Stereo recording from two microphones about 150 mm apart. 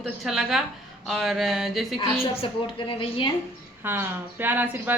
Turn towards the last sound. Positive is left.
turn(degrees=-10)  # may be behind; listen again after turning